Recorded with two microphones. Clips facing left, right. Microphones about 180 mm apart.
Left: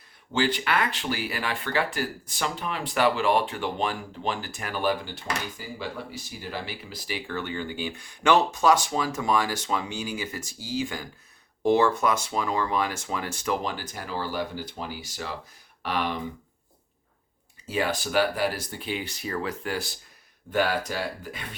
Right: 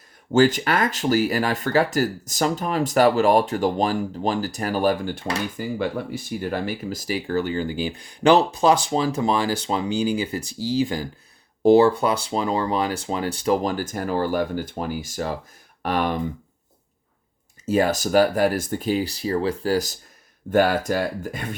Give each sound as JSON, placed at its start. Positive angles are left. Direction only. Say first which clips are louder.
{"t": 0.3, "sound": "speech", "louder": "right 8 dB", "side_deg": -45}
{"t": 17.7, "sound": "speech", "louder": "right 8 dB", "side_deg": -40}